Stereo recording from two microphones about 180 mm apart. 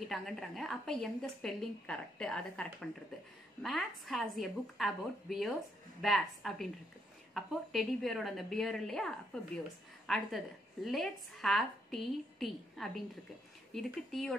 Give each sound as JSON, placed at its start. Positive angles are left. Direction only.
{"t": 0.1, "sound": "a woman's voice", "side_deg": 0}